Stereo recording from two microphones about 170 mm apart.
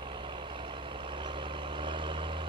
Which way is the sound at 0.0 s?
30° right (ahead or behind).